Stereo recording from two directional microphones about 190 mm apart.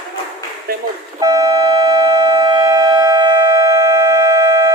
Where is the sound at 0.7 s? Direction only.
50° right (ahead or behind).